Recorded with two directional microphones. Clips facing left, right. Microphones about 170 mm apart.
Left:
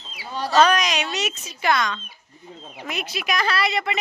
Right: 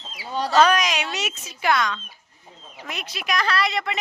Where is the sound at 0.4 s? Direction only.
10° right (ahead or behind).